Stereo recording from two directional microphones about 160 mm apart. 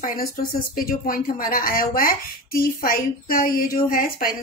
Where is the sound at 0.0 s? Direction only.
65° left (ahead or behind).